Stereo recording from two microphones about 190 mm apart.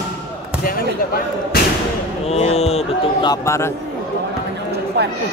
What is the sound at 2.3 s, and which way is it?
Speech, 35° left (ahead or behind).